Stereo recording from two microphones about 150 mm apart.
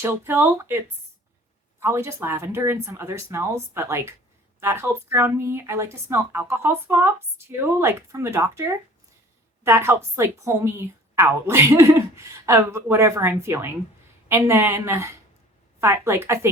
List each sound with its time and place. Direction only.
0.0 s a woman's voice: 15° right (ahead or behind)
1.8 s a woman's voice: 15° right (ahead or behind)